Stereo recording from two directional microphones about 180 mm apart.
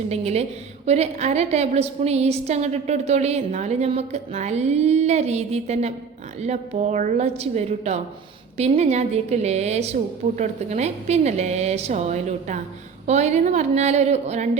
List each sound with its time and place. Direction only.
0.1 s a woman's voice: 35° right (ahead or behind)